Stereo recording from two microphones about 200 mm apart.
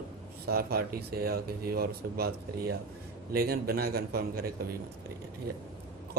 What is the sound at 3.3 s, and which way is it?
Speech, 50° right (ahead or behind).